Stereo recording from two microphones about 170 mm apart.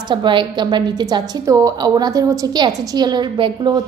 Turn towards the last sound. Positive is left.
turn(degrees=-25)  # may be behind; listen again after turning